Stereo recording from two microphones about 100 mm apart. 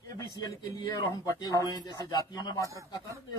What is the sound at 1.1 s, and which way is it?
A man's voice, 35° left (ahead or behind).